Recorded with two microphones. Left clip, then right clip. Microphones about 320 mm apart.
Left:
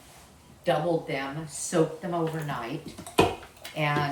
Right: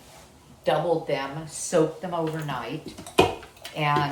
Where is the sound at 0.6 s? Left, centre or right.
Centre.